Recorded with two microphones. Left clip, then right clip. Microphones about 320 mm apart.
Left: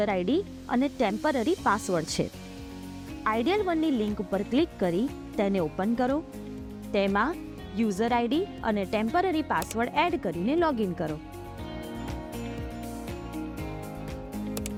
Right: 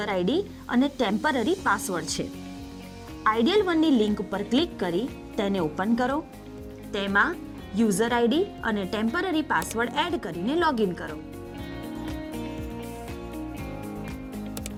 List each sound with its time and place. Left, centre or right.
0.0 s a woman's voice: right
3.2 s a woman's voice: right